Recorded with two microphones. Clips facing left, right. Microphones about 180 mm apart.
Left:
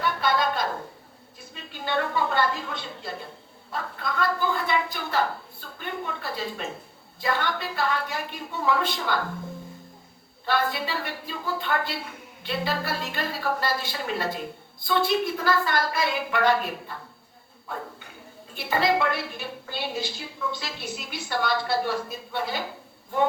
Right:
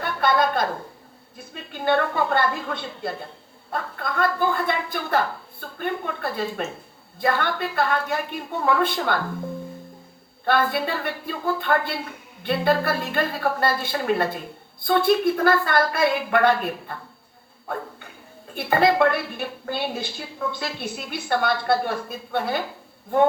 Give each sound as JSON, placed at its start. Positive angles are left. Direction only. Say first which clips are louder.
{"t": 0.0, "sound": "a woman's voice", "louder": "right 3 dB", "side_deg": -55}
{"t": 10.4, "sound": "a woman's voice", "louder": "right 4 dB", "side_deg": -55}